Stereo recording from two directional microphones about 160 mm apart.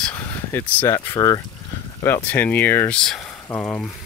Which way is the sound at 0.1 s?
15° left (ahead or behind).